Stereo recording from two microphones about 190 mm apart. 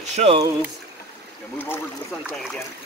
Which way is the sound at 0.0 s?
35° right (ahead or behind).